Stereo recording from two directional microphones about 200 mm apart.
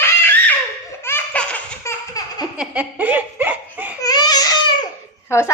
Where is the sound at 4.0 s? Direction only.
20° left (ahead or behind).